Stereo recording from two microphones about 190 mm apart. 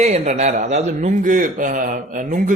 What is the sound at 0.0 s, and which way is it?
Speech, 35° right (ahead or behind).